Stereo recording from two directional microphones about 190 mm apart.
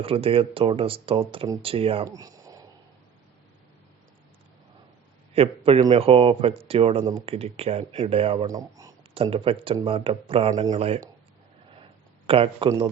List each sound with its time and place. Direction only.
0.0 s speech: 30° right (ahead or behind)
2.0 s a sound: 20° right (ahead or behind)
5.3 s a man's voice: 30° right (ahead or behind)
8.4 s speech: 20° right (ahead or behind)
9.1 s speech: 30° right (ahead or behind)
12.2 s speech: 30° right (ahead or behind)